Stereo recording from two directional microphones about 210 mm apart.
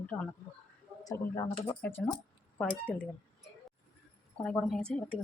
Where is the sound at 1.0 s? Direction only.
15° left (ahead or behind).